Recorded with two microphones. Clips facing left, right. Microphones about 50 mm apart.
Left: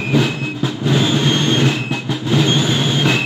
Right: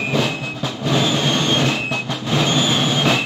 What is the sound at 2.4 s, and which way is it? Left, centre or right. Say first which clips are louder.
Vehicle: even; centre.